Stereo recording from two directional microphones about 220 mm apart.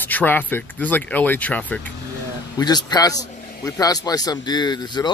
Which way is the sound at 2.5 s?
20° left (ahead or behind).